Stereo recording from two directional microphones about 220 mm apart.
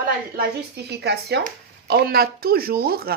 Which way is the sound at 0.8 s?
50° right (ahead or behind).